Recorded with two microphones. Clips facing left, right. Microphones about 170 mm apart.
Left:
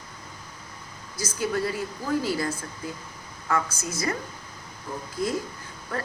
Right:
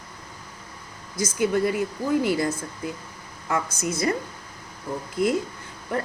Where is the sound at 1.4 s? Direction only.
20° right (ahead or behind).